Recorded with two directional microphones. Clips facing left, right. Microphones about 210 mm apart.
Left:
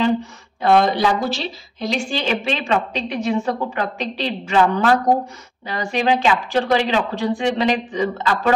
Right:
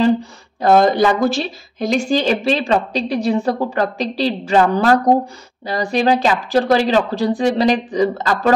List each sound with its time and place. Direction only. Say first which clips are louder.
0.0 s speech: right 4 dB; 40° right (ahead or behind)